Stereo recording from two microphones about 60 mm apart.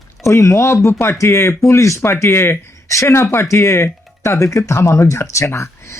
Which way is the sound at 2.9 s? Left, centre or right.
Left.